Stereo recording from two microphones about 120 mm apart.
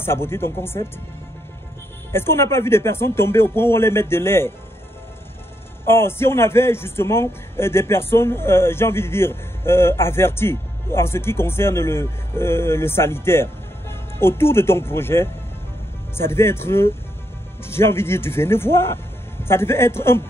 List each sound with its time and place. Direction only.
0.0 s a man's voice: 20° left (ahead or behind)
2.1 s a man's voice: 20° left (ahead or behind)
5.9 s a man's voice: 20° left (ahead or behind)